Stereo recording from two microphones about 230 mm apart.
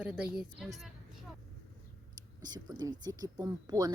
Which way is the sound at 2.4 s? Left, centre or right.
Centre.